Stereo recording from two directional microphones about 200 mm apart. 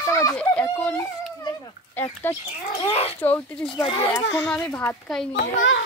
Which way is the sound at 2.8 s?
30° left (ahead or behind).